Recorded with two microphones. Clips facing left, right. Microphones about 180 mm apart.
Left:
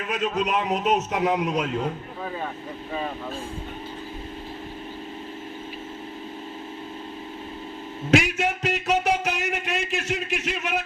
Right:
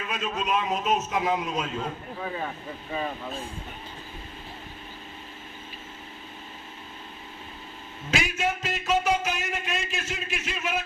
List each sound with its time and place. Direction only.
0.1 s speech: 70° left (ahead or behind)
8.1 s speech: 70° left (ahead or behind)